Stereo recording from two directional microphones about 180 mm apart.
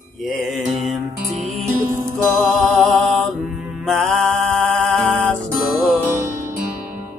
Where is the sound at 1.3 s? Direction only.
40° right (ahead or behind).